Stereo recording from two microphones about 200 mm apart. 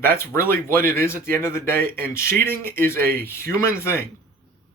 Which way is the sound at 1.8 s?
45° right (ahead or behind).